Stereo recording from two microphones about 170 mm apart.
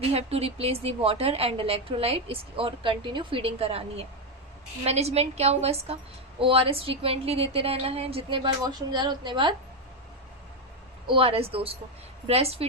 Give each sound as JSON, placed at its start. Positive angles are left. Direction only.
{"t": 0.1, "sound": "a woman's voice", "side_deg": -35}
{"t": 11.0, "sound": "a woman's voice", "side_deg": -30}